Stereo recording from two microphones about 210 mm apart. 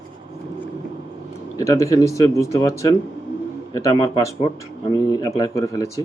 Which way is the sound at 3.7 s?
15° left (ahead or behind).